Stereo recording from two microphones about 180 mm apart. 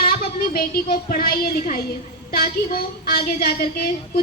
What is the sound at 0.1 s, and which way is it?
A child's voice, 60° left (ahead or behind).